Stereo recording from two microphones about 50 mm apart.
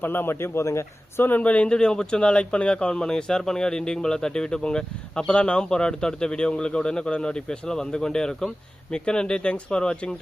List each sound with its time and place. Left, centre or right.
0.0 s a man's voice: left
0.6 s speech: left
1.4 s a man's voice: left